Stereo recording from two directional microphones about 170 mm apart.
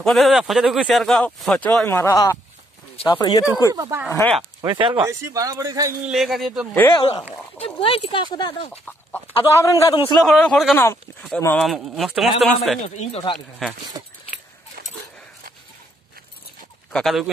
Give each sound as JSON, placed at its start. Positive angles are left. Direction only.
{"t": 0.0, "sound": "speech", "side_deg": 0}
{"t": 3.7, "sound": "a man's voice", "side_deg": -20}
{"t": 4.1, "sound": "speech", "side_deg": 10}
{"t": 4.4, "sound": "speech", "side_deg": -25}
{"t": 5.0, "sound": "a man's voice", "side_deg": -20}
{"t": 6.0, "sound": "speech", "side_deg": 0}
{"t": 6.7, "sound": "speech", "side_deg": 10}
{"t": 7.0, "sound": "speech", "side_deg": 30}
{"t": 9.6, "sound": "speech", "side_deg": 20}
{"t": 10.2, "sound": "speech", "side_deg": 0}
{"t": 12.8, "sound": "speech", "side_deg": 40}
{"t": 13.6, "sound": "speech", "side_deg": 0}
{"t": 14.8, "sound": "dog", "side_deg": -60}
{"t": 16.9, "sound": "speech", "side_deg": 0}